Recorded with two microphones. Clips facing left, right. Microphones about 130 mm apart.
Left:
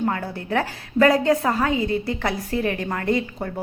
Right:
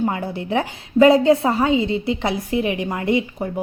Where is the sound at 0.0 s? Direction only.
20° right (ahead or behind).